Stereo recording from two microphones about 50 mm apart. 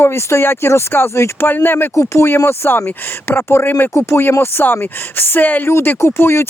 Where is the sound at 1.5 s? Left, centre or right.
Left.